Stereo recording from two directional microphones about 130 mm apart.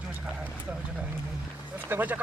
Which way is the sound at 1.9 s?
15° right (ahead or behind).